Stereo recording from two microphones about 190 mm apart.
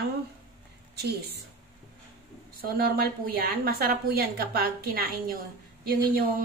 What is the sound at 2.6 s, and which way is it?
A woman's voice, 55° right (ahead or behind).